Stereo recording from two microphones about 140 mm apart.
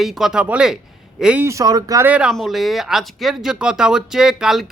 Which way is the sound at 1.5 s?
25° right (ahead or behind).